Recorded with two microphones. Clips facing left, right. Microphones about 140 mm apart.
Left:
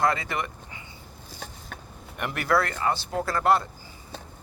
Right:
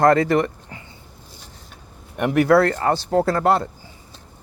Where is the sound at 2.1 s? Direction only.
60° right (ahead or behind).